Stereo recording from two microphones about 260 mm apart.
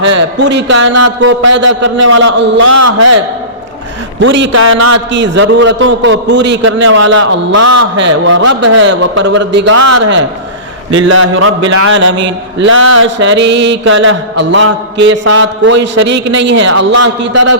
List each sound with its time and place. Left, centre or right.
0.3 s a man's voice: right
2.7 s a man's voice: right
4.2 s a man's voice: right
9.7 s a man's voice: right
10.9 s a man's voice: right